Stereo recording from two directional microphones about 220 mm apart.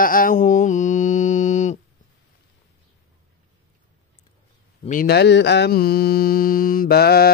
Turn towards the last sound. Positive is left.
turn(degrees=45)  # may be behind; listen again after turning